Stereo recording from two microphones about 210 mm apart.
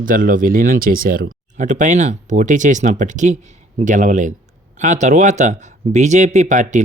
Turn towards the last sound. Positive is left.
turn(degrees=-35)  # may be behind; listen again after turning